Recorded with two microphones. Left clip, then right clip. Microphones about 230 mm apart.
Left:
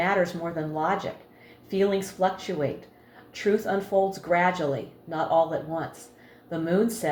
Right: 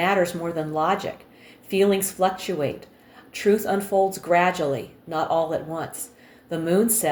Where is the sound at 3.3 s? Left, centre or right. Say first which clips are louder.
Right 4 dB; right.